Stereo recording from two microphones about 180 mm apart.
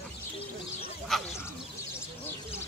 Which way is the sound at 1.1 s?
Centre (ahead or behind).